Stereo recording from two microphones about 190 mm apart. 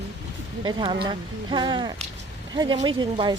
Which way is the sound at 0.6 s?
25° right (ahead or behind).